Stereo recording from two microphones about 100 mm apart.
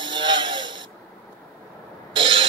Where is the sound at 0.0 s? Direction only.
50° right (ahead or behind).